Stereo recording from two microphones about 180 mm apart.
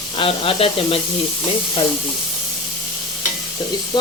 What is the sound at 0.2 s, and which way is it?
Speech, 30° left (ahead or behind).